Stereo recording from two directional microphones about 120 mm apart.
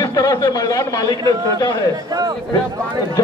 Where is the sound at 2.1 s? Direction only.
30° right (ahead or behind).